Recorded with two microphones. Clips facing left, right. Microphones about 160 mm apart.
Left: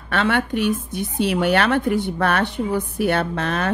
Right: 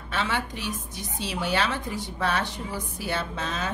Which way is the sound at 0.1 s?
60° left (ahead or behind).